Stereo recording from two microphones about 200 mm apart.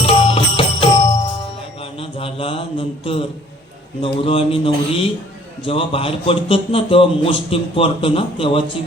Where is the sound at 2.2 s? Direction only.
30° left (ahead or behind).